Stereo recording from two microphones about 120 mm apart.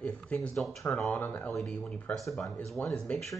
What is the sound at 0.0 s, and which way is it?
Speech, 10° left (ahead or behind).